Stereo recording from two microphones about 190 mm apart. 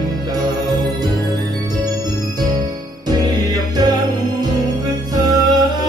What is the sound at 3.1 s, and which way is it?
Music, 20° right (ahead or behind).